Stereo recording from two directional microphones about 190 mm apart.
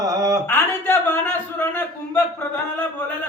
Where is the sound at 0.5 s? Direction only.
10° left (ahead or behind).